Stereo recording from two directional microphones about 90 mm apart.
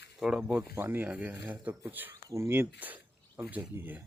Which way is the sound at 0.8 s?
20° right (ahead or behind).